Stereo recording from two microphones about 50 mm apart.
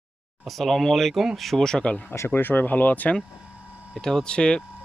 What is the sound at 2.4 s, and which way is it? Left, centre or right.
Speech, left.